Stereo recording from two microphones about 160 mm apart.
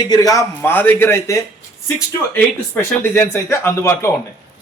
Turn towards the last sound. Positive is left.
turn(degrees=15)  # may be behind; listen again after turning